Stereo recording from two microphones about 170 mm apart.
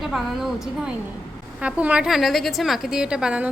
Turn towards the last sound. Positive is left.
turn(degrees=-5)  # may be behind; listen again after turning